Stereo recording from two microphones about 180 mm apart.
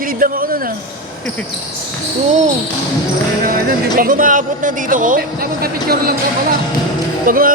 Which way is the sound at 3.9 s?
50° right (ahead or behind).